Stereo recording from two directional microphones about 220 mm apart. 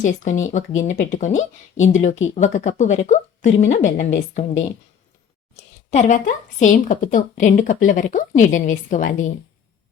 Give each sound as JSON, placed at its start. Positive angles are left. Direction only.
{"t": 0.0, "sound": "speech", "side_deg": 35}